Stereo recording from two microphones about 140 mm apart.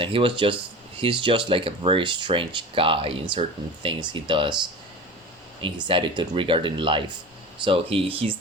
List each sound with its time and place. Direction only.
0.0 s speech: 40° right (ahead or behind)
5.6 s speech: 35° right (ahead or behind)